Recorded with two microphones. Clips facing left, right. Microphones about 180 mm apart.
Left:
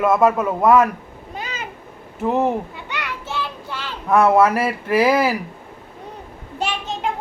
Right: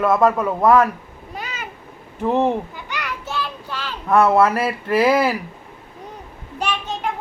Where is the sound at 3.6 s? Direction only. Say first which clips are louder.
Right 1 dB; 20° left (ahead or behind).